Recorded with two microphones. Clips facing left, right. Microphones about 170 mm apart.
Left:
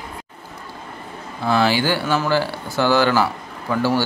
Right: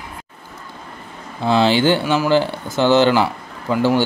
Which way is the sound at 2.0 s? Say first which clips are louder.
Right 3 dB; 10° right (ahead or behind).